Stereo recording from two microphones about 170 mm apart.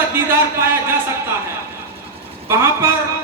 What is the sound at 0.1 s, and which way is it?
Speech, 15° right (ahead or behind).